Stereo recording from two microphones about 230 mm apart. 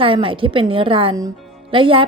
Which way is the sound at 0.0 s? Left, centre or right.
Right.